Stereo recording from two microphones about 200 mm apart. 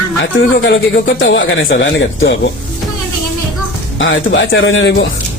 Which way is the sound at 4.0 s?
70° left (ahead or behind).